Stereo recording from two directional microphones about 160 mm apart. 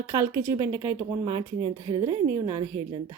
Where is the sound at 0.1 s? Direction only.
15° right (ahead or behind).